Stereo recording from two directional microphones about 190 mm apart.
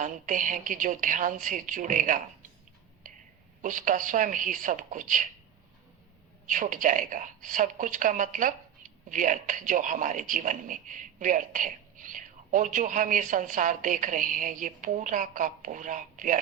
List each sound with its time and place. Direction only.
0.0 s a woman's voice: 45° right (ahead or behind)
3.6 s a woman's voice: 45° right (ahead or behind)
6.5 s a woman's voice: 45° right (ahead or behind)